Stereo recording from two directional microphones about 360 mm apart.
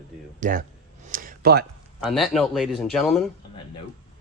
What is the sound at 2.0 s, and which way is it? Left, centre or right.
Speech, centre.